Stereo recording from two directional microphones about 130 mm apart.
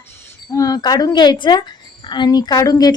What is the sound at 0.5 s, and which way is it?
A woman's voice, 30° left (ahead or behind).